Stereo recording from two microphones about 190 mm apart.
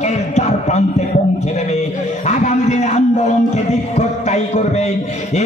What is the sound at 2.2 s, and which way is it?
Music, 35° left (ahead or behind).